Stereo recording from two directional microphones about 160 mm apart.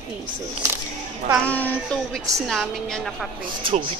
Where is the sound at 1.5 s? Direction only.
10° left (ahead or behind).